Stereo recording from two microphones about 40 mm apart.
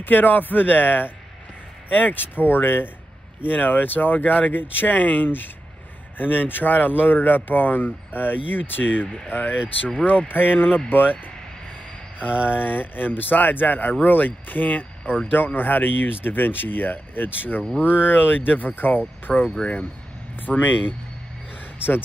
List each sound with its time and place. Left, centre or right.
0.0 s speech: left
12.3 s speech: right
12.5 s speech: left
19.3 s speech: centre
19.6 s speech: left
20.3 s speech: left